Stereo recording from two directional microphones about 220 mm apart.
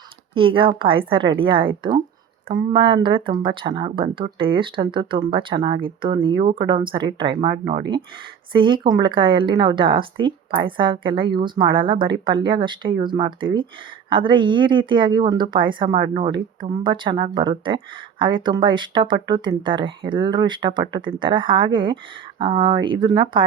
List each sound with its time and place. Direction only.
0.3 s speech: 25° right (ahead or behind)